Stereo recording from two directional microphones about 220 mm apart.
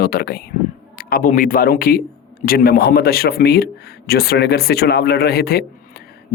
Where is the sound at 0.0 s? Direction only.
45° left (ahead or behind).